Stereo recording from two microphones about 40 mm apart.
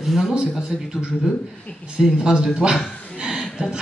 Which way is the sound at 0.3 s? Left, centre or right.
Centre.